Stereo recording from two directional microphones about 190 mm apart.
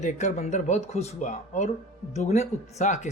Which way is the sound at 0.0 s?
40° left (ahead or behind).